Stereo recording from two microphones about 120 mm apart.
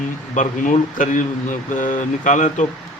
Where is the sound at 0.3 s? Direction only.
90° left.